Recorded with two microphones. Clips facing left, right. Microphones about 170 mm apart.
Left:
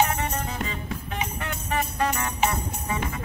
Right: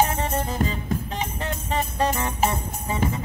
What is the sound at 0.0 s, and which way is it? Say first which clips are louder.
Music: right 2 dB; 35° right (ahead or behind).